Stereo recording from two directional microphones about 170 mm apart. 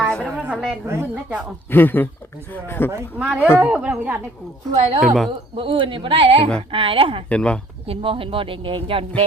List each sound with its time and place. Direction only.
0.1 s a sound: 5° left (ahead or behind)
0.4 s a woman's voice: 10° right (ahead or behind)
1.7 s speech: 10° left (ahead or behind)
2.9 s a woman's voice: 10° right (ahead or behind)
4.7 s speech: 40° right (ahead or behind)
5.0 s speech: centre (ahead or behind)
5.5 s speech: 30° right (ahead or behind)
7.3 s speech: 5° left (ahead or behind)
7.9 s speech: 30° right (ahead or behind)